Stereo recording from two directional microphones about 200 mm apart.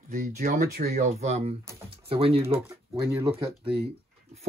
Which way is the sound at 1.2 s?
30° right (ahead or behind).